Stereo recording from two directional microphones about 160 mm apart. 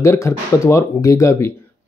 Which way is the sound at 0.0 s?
15° left (ahead or behind).